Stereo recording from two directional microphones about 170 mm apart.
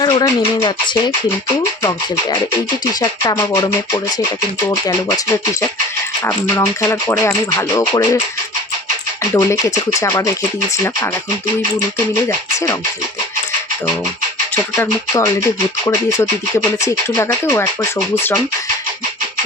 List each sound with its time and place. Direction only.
0.0 s speech: 25° left (ahead or behind)
2.8 s speech: 20° left (ahead or behind)
9.3 s speech: 20° left (ahead or behind)
14.5 s speech: 15° left (ahead or behind)